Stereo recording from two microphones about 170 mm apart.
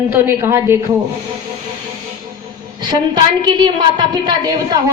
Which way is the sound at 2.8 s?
25° right (ahead or behind).